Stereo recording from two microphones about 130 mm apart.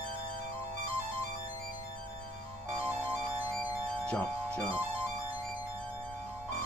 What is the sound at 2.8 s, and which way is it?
Music, 15° right (ahead or behind).